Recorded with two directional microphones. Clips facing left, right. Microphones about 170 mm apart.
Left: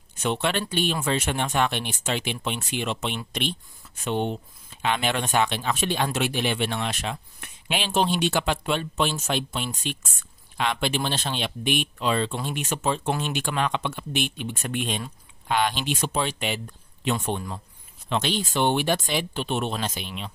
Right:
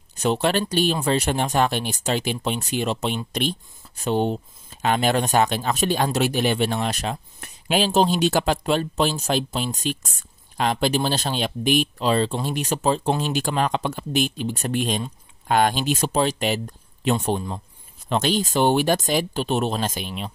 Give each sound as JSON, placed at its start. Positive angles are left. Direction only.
{"t": 0.1, "sound": "speech", "side_deg": -35}